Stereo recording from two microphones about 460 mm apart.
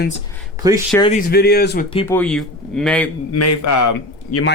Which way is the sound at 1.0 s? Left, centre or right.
Centre.